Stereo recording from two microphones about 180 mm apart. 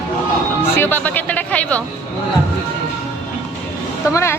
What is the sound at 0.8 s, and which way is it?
Speech, 10° left (ahead or behind).